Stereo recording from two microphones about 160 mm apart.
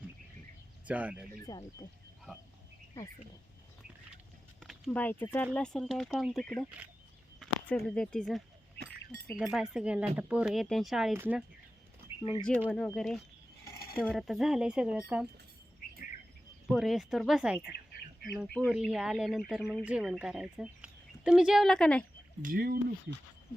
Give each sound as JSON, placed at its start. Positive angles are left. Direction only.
{"t": 0.9, "sound": "speech", "side_deg": -10}
{"t": 1.5, "sound": "speech", "side_deg": 25}
{"t": 4.6, "sound": "speech", "side_deg": 5}
{"t": 7.8, "sound": "speech", "side_deg": 5}
{"t": 11.1, "sound": "speech", "side_deg": -15}
{"t": 12.2, "sound": "speech", "side_deg": 30}
{"t": 12.9, "sound": "speech", "side_deg": 0}
{"t": 16.6, "sound": "speech", "side_deg": 0}
{"t": 22.4, "sound": "speech", "side_deg": -60}